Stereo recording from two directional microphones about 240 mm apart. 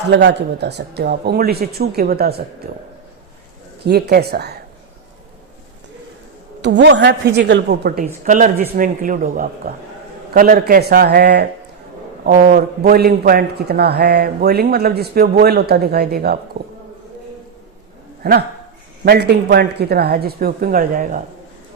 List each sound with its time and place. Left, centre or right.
0.1 s a man's voice: right
3.8 s a man's voice: right
6.6 s a woman's voice: right
18.2 s a man's voice: right